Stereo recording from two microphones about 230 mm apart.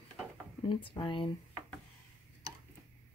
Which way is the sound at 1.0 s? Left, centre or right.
Left.